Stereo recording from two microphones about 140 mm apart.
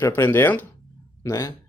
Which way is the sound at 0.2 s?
15° left (ahead or behind).